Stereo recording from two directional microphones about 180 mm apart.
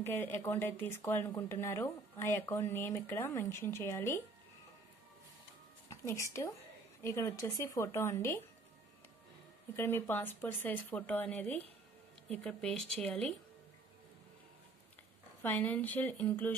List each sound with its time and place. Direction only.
0.0 s speech: 10° left (ahead or behind)
5.9 s speech: 15° left (ahead or behind)
9.8 s speech: 10° left (ahead or behind)
15.4 s speech: 10° left (ahead or behind)